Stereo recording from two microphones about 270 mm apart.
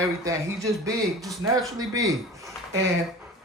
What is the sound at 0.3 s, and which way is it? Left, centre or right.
A man's voice, centre.